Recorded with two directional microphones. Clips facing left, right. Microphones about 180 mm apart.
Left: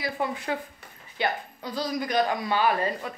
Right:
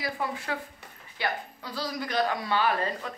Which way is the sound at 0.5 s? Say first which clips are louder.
Left 3 dB; 20° left (ahead or behind).